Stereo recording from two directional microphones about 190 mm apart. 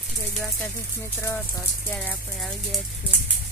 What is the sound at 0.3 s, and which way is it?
Speech, 5° left (ahead or behind).